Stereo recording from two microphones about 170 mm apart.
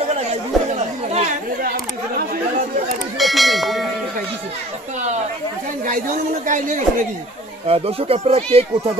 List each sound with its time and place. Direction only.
0.7 s chatter: 45° right (ahead or behind)
3.2 s bell: centre (ahead or behind)
6.4 s speech: 50° right (ahead or behind)
7.6 s speech: 35° right (ahead or behind)